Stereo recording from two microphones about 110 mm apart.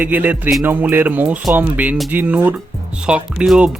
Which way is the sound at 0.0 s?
15° right (ahead or behind).